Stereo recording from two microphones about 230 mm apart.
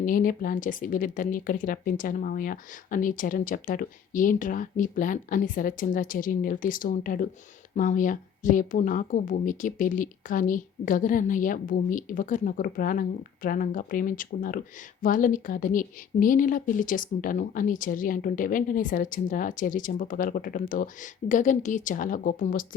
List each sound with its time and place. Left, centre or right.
0.0 s a woman's voice: left